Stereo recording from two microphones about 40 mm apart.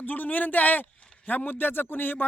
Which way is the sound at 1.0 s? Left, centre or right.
Left.